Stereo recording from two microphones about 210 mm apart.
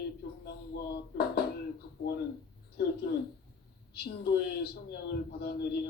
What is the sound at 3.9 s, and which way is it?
Speech, 50° left (ahead or behind).